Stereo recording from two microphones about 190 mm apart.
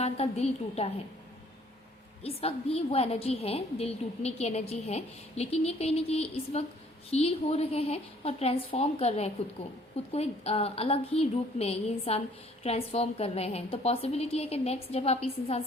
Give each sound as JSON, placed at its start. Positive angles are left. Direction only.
{"t": 0.0, "sound": "a woman's voice", "side_deg": 35}
{"t": 2.2, "sound": "a woman's voice", "side_deg": 30}